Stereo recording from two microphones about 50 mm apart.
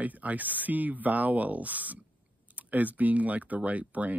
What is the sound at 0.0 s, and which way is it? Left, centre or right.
Speech, right.